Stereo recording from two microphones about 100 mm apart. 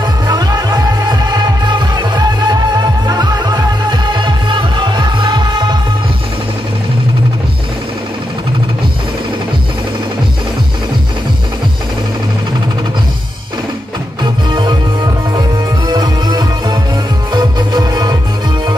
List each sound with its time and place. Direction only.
0.3 s music: 40° right (ahead or behind)
14.2 s music: 50° right (ahead or behind)
15.9 s music: 45° right (ahead or behind)